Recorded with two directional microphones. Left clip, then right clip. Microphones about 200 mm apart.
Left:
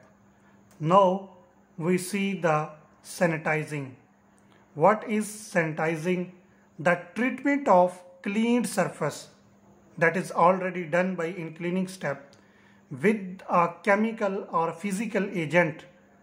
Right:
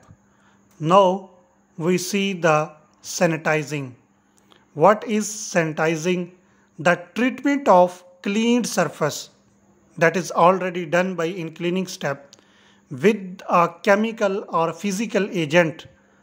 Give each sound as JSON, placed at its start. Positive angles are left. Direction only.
{"t": 0.7, "sound": "speech", "side_deg": -30}